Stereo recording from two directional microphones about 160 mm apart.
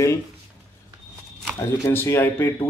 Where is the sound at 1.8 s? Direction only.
15° left (ahead or behind).